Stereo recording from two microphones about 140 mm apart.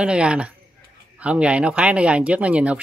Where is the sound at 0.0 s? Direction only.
5° right (ahead or behind).